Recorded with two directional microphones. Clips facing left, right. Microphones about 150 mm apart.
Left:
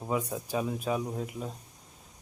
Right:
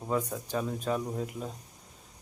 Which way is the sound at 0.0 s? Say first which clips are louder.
Even; 10° left (ahead or behind).